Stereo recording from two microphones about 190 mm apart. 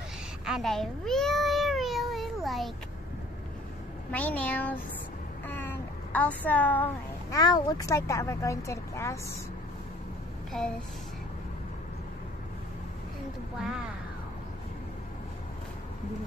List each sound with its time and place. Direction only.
0.5 s a sound: centre (ahead or behind)
4.1 s speech: 10° left (ahead or behind)
10.6 s speech: 5° left (ahead or behind)